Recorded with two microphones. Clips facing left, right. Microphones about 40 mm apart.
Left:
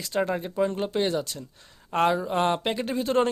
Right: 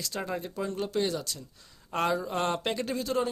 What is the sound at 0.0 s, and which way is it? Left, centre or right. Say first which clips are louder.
Speech: left 7 dB; left.